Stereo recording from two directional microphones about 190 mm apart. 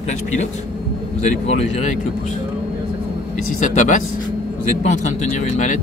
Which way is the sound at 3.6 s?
40° left (ahead or behind).